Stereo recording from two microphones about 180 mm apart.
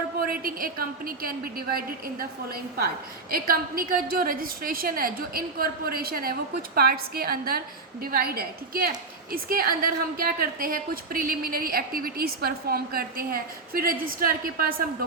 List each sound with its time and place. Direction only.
0.2 s a woman's voice: 55° right (ahead or behind)